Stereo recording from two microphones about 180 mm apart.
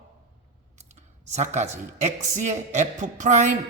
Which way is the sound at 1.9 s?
40° right (ahead or behind).